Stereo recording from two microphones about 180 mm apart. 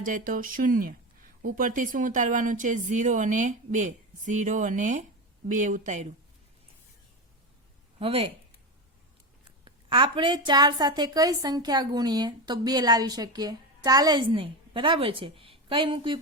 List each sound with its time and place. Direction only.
0.0 s speech: 45° right (ahead or behind)
7.9 s speech: 35° right (ahead or behind)
9.6 s a woman's voice: 25° right (ahead or behind)